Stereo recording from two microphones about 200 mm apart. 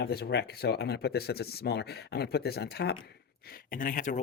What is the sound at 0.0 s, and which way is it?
Speech, 50° left (ahead or behind).